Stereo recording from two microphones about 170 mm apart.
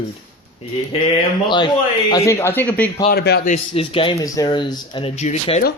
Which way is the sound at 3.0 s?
70° left (ahead or behind).